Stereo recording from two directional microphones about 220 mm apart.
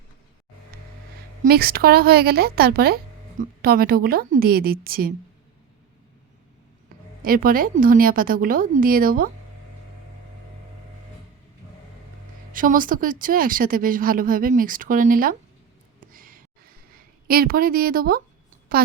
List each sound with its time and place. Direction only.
0.7 s vehicle: 45° right (ahead or behind)
1.4 s a woman's voice: 45° right (ahead or behind)
7.2 s speech: 40° right (ahead or behind)
12.5 s speech: 40° right (ahead or behind)
16.0 s gasp: 40° right (ahead or behind)
16.9 s speech: 40° right (ahead or behind)